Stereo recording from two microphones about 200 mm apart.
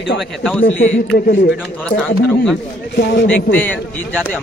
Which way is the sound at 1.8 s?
5° left (ahead or behind).